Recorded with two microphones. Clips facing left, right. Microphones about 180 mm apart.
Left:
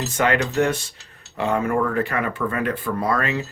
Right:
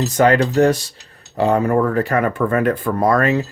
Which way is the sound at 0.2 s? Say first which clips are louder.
Right 6 dB; 35° right (ahead or behind).